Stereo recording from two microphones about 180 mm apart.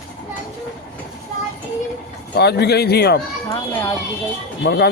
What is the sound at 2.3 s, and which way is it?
Speech, 65° left (ahead or behind).